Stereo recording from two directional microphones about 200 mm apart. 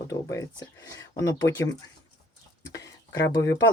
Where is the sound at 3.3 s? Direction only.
15° left (ahead or behind).